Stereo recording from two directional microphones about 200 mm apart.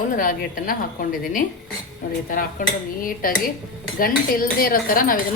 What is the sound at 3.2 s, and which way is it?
Speech, 45° left (ahead or behind).